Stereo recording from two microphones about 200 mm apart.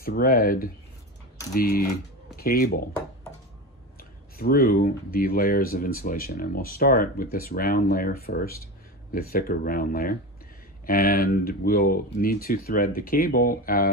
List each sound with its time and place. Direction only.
0.0 s speech: 50° left (ahead or behind)
4.4 s speech: 50° left (ahead or behind)